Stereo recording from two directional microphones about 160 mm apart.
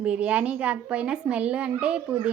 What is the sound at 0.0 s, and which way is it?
Speech, 5° right (ahead or behind).